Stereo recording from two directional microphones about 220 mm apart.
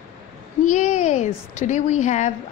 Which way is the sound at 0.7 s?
35° left (ahead or behind).